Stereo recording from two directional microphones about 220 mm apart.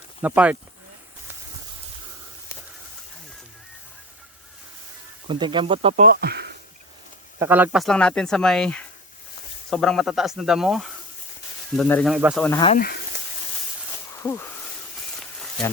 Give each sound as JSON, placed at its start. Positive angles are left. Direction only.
{"t": 0.2, "sound": "speech", "side_deg": -5}
{"t": 5.3, "sound": "speech", "side_deg": -20}
{"t": 6.1, "sound": "a sound", "side_deg": -45}
{"t": 7.3, "sound": "speech", "side_deg": -10}
{"t": 12.4, "sound": "speech", "side_deg": 10}
{"t": 12.7, "sound": "speech", "side_deg": 45}
{"t": 14.2, "sound": "a sound", "side_deg": 10}